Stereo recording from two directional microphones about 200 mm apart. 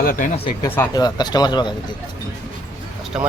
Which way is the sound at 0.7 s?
15° left (ahead or behind).